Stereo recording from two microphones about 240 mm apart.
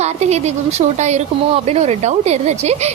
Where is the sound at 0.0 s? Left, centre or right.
Right.